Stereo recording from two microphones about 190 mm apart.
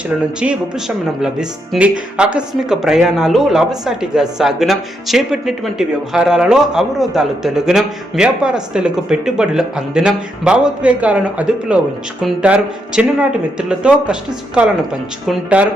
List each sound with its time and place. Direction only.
0.3 s speech: 5° right (ahead or behind)